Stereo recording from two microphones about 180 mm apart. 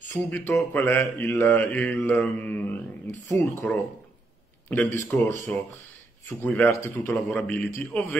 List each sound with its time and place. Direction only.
0.1 s mantra: 15° left (ahead or behind)
6.4 s mantra: 10° left (ahead or behind)
7.2 s mantra: centre (ahead or behind)